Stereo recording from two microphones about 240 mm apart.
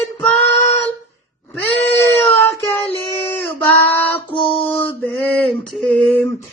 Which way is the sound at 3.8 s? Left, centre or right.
Centre.